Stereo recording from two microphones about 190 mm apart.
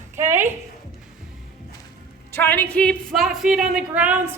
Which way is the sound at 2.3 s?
10° left (ahead or behind).